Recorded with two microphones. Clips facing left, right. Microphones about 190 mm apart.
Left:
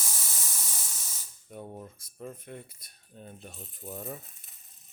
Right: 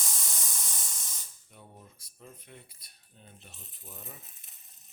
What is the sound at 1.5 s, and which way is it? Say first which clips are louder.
Speech: left 11 dB; 50° left (ahead or behind).